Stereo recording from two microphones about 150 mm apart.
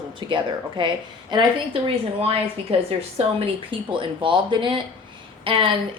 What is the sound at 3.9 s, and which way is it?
A woman's voice, 35° right (ahead or behind).